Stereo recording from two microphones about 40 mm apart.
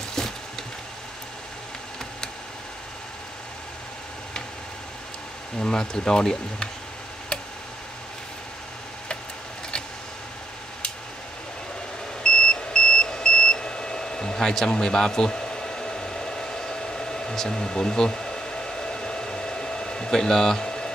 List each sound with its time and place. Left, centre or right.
5.6 s speech: centre
12.2 s beep: left